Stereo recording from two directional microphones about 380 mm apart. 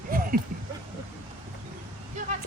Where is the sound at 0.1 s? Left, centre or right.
Right.